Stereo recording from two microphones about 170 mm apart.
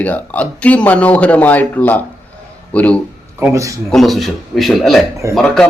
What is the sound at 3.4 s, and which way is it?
Speech, 15° right (ahead or behind).